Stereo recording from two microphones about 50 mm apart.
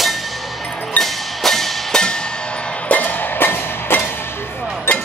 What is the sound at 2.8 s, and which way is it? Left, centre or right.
Music, left.